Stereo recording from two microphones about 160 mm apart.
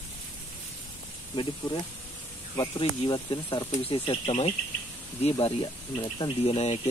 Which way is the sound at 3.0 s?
30° left (ahead or behind).